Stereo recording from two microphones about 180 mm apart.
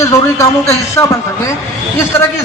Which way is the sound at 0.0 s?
15° left (ahead or behind).